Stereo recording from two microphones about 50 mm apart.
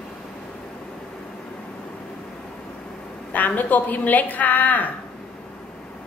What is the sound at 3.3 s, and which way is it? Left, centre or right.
A woman's voice, left.